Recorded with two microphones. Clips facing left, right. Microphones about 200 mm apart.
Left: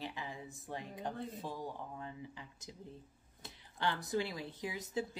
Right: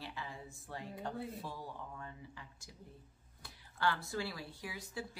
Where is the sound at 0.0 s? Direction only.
20° left (ahead or behind).